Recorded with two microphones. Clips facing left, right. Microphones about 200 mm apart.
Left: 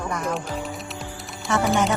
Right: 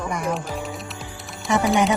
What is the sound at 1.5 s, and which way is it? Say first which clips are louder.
Speech: right 2 dB; 15° right (ahead or behind).